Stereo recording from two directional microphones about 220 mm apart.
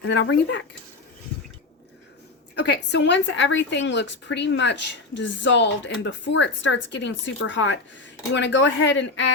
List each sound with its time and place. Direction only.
0.0 s a woman's voice: 55° left (ahead or behind)
2.6 s a woman's voice: 50° left (ahead or behind)